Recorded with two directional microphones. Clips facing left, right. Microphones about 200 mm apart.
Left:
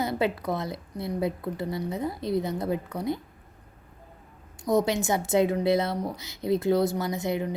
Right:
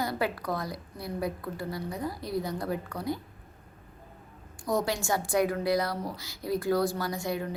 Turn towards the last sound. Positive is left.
turn(degrees=20)  # may be behind; listen again after turning